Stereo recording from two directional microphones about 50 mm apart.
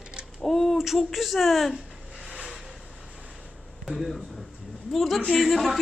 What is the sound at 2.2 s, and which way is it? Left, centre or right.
Vehicle, centre.